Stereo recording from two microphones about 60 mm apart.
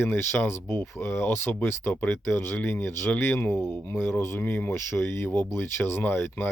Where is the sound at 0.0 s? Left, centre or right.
Left.